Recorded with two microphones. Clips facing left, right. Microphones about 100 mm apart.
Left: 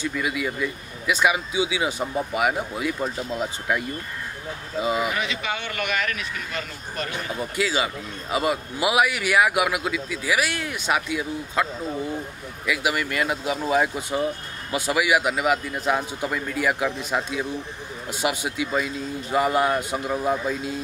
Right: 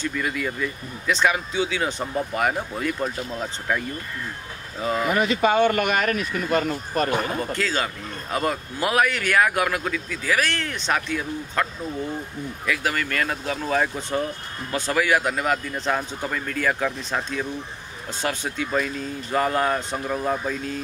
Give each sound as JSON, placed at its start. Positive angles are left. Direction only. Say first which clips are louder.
{"t": 0.0, "sound": "a man's voice", "louder": "even", "side_deg": 5}
{"t": 5.1, "sound": "speech", "louder": "right 8 dB", "side_deg": -45}
{"t": 7.3, "sound": "a man's voice", "louder": "even", "side_deg": 10}
{"t": 12.6, "sound": "a man's voice", "louder": "left 1 dB", "side_deg": 10}